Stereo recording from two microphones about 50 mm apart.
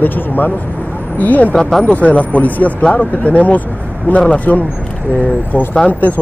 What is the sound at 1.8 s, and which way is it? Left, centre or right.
Speech, left.